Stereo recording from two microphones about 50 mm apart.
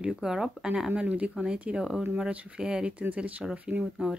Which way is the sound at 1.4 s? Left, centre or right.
Centre.